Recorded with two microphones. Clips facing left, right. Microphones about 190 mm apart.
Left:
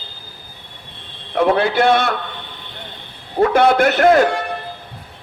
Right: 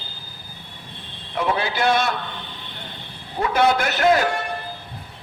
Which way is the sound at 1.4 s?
55° left (ahead or behind).